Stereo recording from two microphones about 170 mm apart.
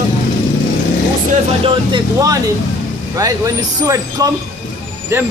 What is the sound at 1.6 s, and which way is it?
A man's voice, 25° right (ahead or behind).